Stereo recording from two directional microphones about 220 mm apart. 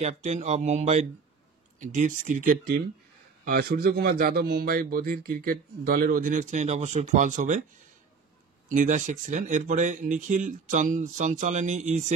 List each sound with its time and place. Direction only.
0.0 s a man's voice: 30° right (ahead or behind)
8.6 s a man's voice: 35° right (ahead or behind)